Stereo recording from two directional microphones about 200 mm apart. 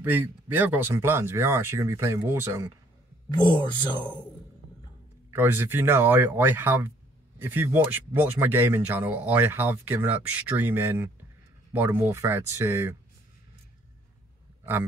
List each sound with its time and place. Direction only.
0.0 s speech: 10° right (ahead or behind)
3.3 s speech: 20° left (ahead or behind)
5.3 s speech: 10° right (ahead or behind)
14.6 s a sound: 10° right (ahead or behind)